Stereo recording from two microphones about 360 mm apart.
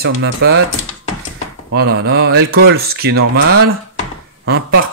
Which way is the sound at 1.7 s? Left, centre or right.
Right.